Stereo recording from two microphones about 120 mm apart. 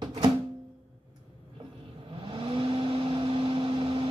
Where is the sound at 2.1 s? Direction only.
45° right (ahead or behind).